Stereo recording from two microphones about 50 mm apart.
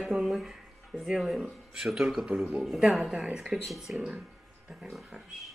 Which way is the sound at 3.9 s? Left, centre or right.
Right.